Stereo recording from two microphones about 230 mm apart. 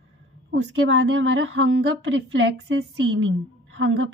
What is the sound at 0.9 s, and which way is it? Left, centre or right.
A woman's voice, right.